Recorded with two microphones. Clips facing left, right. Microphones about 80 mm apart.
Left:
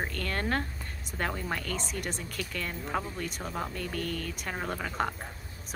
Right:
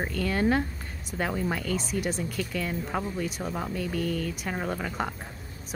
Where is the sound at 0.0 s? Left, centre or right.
Centre.